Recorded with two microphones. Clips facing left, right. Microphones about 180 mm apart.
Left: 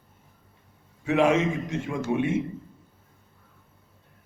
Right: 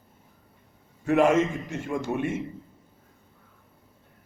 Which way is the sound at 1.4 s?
75° left (ahead or behind).